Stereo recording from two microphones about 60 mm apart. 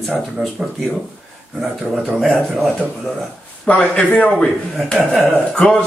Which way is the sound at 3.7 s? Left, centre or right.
Centre.